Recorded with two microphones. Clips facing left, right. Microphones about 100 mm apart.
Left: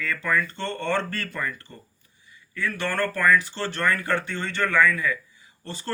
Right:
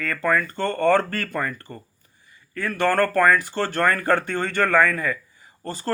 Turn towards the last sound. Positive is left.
turn(degrees=-40)  # may be behind; listen again after turning